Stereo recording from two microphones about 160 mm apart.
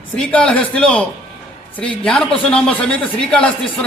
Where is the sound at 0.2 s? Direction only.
5° left (ahead or behind).